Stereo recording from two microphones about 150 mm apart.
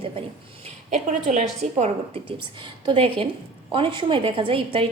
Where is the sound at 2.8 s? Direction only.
35° right (ahead or behind).